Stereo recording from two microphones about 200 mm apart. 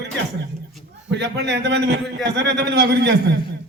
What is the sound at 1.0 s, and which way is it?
A man's voice, 60° right (ahead or behind).